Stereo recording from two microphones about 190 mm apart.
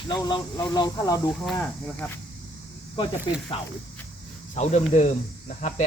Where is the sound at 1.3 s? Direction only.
5° left (ahead or behind).